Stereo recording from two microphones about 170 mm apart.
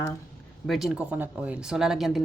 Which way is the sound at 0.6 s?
Centre (ahead or behind).